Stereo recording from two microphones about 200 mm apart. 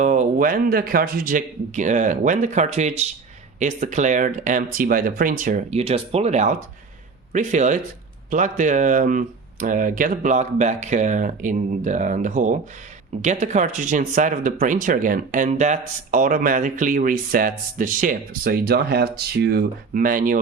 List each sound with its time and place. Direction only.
0.0 s speech: 40° right (ahead or behind)